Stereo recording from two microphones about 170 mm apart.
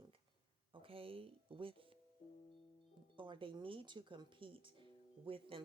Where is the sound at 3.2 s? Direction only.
30° right (ahead or behind).